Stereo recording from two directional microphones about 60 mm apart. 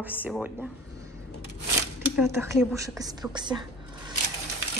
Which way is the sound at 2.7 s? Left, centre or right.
Right.